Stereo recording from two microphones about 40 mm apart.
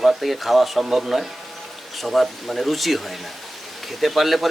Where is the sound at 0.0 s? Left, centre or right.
Centre.